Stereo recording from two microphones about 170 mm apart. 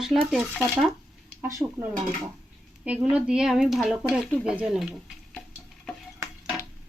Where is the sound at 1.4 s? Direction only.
15° right (ahead or behind); by 5.4 s centre (ahead or behind).